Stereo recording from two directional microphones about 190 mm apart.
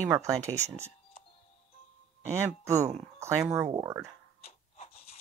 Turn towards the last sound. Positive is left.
turn(degrees=30)  # may be behind; listen again after turning